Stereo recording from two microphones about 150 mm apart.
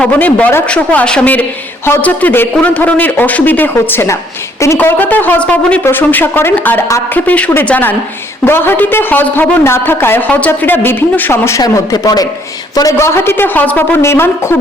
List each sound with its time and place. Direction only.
0.0 s a man's voice: 10° left (ahead or behind)